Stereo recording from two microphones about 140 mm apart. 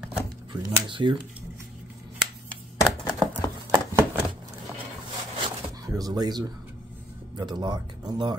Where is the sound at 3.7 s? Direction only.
20° right (ahead or behind).